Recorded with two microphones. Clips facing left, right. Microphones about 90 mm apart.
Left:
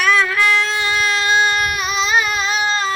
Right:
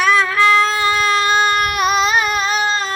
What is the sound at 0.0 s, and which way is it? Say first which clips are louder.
Baby cry: right 2 dB; 30° right (ahead or behind).